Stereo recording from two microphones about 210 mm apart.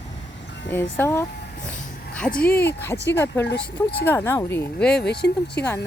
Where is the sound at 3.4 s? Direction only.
50° left (ahead or behind).